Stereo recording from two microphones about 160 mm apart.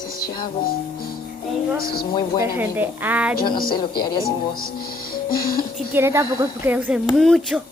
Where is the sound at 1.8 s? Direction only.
70° left (ahead or behind).